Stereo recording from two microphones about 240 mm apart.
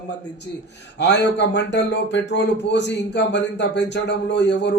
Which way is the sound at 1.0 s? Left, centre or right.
Left.